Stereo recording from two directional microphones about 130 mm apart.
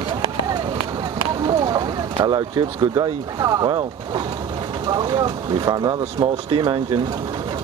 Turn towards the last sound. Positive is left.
turn(degrees=-40)  # may be behind; listen again after turning